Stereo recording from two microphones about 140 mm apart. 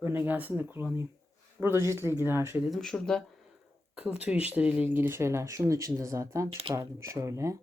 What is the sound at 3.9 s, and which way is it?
Speech, 5° right (ahead or behind).